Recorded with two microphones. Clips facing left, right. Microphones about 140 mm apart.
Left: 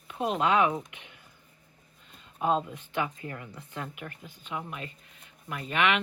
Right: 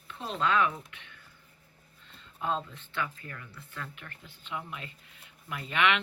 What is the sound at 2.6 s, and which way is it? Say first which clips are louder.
Speech: left 4 dB; 15° left (ahead or behind).